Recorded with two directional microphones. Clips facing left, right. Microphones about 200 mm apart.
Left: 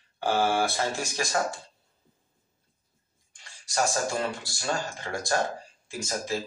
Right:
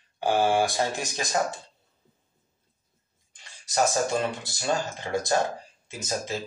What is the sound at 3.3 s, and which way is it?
Speech, 20° right (ahead or behind).